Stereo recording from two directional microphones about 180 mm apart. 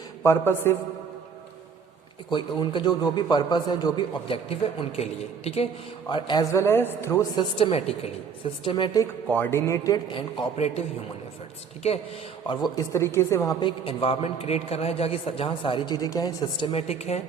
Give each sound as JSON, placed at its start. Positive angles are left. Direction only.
{"t": 0.2, "sound": "a man's voice", "side_deg": 15}
{"t": 2.3, "sound": "a woman's voice", "side_deg": 25}
{"t": 7.3, "sound": "a woman's voice", "side_deg": 30}
{"t": 9.3, "sound": "a woman's voice", "side_deg": 10}
{"t": 12.5, "sound": "a woman's voice", "side_deg": 20}